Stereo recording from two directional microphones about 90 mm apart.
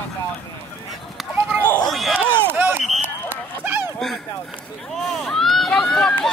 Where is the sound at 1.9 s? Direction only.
5° left (ahead or behind).